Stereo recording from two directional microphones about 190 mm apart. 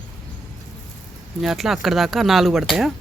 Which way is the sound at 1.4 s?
Centre (ahead or behind).